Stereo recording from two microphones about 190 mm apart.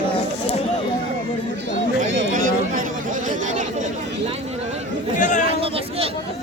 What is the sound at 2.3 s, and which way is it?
Chatter, 45° right (ahead or behind).